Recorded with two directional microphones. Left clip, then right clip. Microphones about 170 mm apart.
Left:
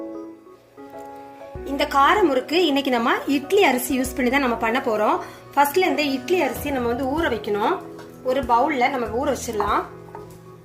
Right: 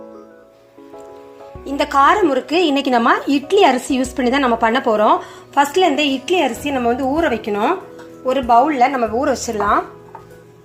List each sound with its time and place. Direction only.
1.6 s a woman's voice: 35° right (ahead or behind)